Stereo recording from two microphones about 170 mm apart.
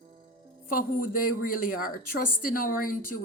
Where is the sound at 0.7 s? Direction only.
55° left (ahead or behind).